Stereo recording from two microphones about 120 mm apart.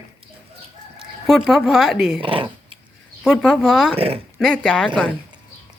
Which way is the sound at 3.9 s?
55° right (ahead or behind).